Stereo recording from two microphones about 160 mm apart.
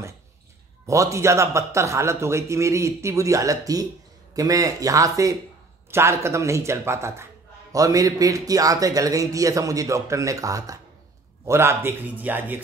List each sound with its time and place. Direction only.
0.8 s a man's voice: 20° right (ahead or behind)